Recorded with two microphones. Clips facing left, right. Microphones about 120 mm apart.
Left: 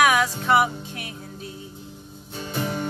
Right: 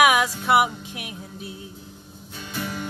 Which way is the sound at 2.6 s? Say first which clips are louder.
Left 3 dB; 40° left (ahead or behind).